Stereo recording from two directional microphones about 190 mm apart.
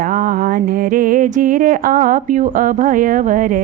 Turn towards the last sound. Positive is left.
turn(degrees=-45)  # may be behind; listen again after turning